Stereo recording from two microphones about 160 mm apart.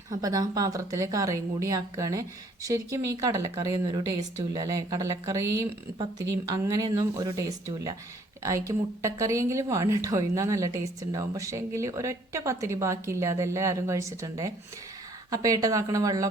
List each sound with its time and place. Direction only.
0.1 s a woman's voice: 20° right (ahead or behind)